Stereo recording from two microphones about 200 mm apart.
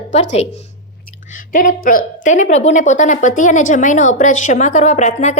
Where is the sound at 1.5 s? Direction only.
40° left (ahead or behind).